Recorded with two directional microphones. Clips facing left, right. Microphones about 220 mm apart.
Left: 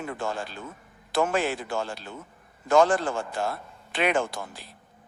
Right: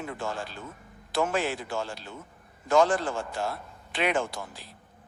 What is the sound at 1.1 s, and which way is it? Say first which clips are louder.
A man's voice: left 2 dB; 55° left (ahead or behind).